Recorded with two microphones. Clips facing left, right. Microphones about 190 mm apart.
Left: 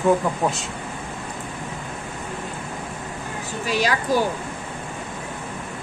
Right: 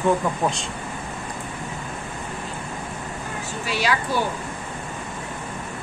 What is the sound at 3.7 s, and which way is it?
Speech, 40° left (ahead or behind).